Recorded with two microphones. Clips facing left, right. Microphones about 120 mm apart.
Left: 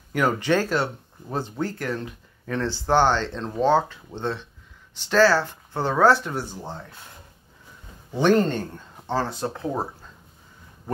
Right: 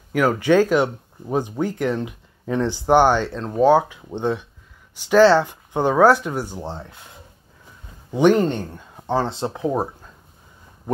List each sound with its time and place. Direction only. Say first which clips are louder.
0.1 s speech: right 5 dB; 5° right (ahead or behind)
8.1 s speech: right 3 dB; 15° right (ahead or behind)